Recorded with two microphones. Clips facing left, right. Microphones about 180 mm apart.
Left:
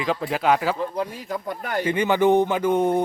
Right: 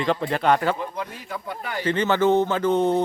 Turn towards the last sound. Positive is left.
turn(degrees=10)  # may be behind; listen again after turning